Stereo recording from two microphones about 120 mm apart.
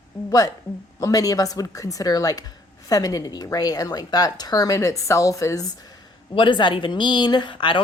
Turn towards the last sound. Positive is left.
turn(degrees=45)  # may be behind; listen again after turning